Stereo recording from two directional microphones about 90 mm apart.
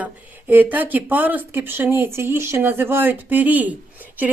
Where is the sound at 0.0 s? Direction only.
20° right (ahead or behind).